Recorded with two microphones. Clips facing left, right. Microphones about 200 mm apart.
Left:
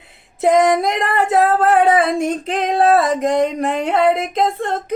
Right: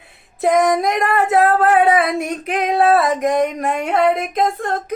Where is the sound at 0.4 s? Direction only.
25° left (ahead or behind).